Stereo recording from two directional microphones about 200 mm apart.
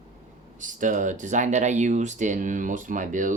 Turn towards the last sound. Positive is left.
turn(degrees=-40)  # may be behind; listen again after turning